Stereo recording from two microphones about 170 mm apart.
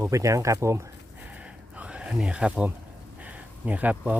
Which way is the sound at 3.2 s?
10° right (ahead or behind).